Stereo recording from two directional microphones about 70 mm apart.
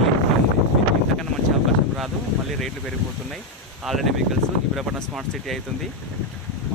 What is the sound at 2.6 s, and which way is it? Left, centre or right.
Speech, centre.